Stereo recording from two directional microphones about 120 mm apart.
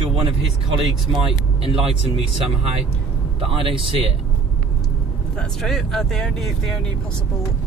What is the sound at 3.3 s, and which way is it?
Speech, 50° right (ahead or behind).